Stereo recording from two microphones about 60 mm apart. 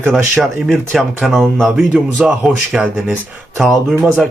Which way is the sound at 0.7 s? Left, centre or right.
Centre.